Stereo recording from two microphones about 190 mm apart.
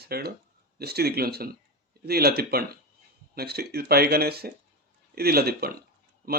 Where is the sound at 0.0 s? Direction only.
55° right (ahead or behind).